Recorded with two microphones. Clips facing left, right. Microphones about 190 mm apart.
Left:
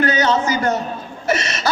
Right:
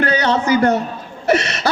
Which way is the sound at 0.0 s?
60° right (ahead or behind).